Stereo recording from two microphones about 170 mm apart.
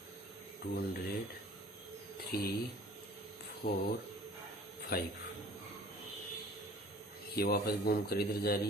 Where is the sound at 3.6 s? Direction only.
65° left (ahead or behind).